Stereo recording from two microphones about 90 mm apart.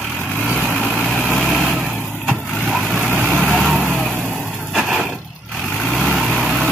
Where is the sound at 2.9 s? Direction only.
20° right (ahead or behind).